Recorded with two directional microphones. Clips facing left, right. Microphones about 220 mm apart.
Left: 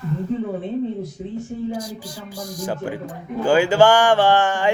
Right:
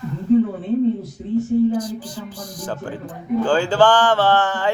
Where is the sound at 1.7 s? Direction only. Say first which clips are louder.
Right 5 dB; 10° left (ahead or behind).